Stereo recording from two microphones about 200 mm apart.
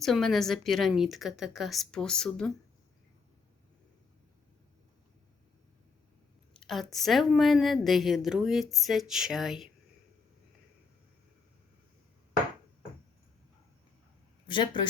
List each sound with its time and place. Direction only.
0.0 s speech: centre (ahead or behind)
6.6 s speech: centre (ahead or behind)
14.4 s speech: 25° left (ahead or behind)